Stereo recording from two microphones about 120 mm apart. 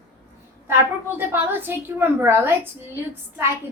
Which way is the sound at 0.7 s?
20° right (ahead or behind).